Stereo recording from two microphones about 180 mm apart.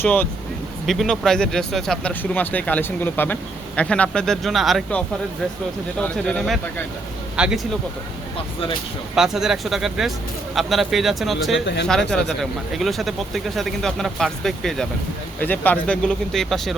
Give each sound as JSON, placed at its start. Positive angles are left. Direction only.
{"t": 0.0, "sound": "speech", "side_deg": 10}
{"t": 9.1, "sound": "speech", "side_deg": 0}
{"t": 11.6, "sound": "speech", "side_deg": 70}
{"t": 12.1, "sound": "speech", "side_deg": 0}